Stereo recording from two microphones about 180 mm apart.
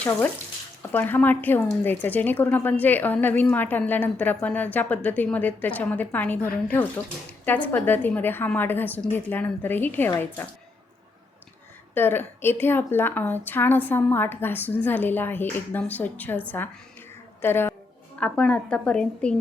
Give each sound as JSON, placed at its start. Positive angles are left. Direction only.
{"t": 0.8, "sound": "speech", "side_deg": 10}
{"t": 11.9, "sound": "speech", "side_deg": 10}
{"t": 17.4, "sound": "a woman's voice", "side_deg": 10}